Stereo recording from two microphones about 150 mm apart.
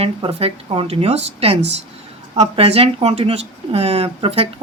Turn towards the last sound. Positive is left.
turn(degrees=-40)  # may be behind; listen again after turning